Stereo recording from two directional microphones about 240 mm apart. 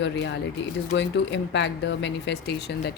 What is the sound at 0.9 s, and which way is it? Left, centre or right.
Speech, left.